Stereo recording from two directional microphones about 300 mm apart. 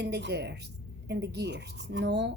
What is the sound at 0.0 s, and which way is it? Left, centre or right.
A woman's voice, right.